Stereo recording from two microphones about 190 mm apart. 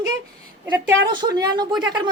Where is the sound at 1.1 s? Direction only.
20° right (ahead or behind).